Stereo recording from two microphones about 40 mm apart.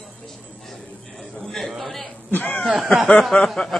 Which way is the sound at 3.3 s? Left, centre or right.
Left.